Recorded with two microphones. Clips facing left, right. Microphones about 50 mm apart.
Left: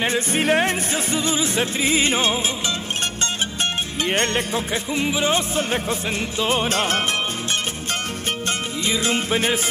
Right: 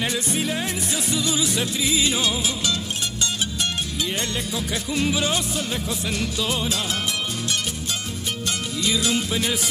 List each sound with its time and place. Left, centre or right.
0.0 s music: left
4.0 s music: left
4.9 s music: left
5.3 s music: left
8.8 s music: left